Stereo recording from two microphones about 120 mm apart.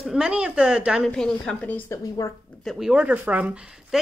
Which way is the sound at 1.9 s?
25° left (ahead or behind).